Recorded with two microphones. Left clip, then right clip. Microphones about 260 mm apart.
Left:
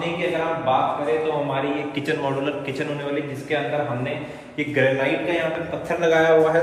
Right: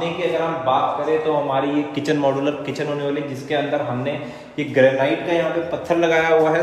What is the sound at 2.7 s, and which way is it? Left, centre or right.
Speech, right.